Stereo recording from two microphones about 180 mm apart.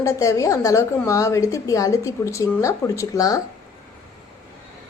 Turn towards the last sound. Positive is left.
turn(degrees=20)  # may be behind; listen again after turning